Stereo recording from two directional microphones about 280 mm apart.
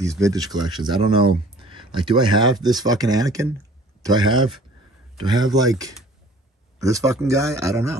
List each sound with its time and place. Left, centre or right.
0.0 s speech: centre